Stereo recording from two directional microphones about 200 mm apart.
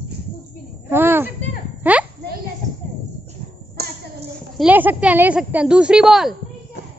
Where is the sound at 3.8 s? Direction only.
50° right (ahead or behind).